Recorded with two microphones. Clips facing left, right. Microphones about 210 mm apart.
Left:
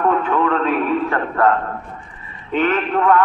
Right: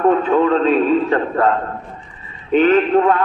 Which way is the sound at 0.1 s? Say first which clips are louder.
Right 4 dB; 25° right (ahead or behind).